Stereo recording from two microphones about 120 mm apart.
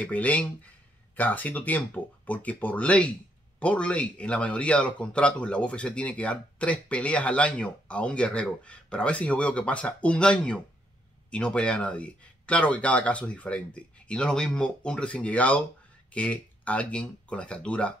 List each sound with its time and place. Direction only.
0.0 s a man's voice: 10° left (ahead or behind)